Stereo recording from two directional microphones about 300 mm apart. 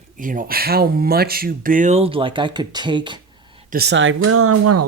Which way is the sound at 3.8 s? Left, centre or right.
Right.